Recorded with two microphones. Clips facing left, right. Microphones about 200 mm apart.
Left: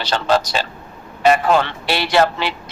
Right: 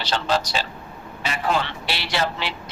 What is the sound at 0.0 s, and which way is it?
Speech, 50° left (ahead or behind).